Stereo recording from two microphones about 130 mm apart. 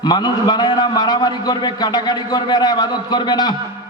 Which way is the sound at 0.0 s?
35° left (ahead or behind).